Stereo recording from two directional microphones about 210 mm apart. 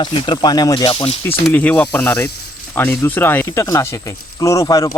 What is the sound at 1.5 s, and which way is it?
Speech, 5° left (ahead or behind).